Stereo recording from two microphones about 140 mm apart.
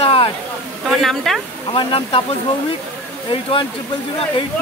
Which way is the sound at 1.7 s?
40° left (ahead or behind).